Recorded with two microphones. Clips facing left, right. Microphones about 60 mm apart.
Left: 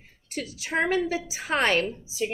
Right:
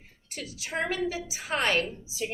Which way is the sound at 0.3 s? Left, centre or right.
Left.